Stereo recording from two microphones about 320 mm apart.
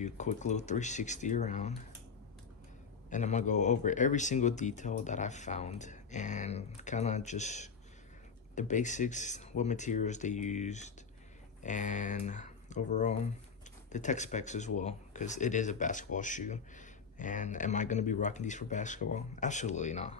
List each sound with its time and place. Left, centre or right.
0.0 s speech: left
3.1 s speech: left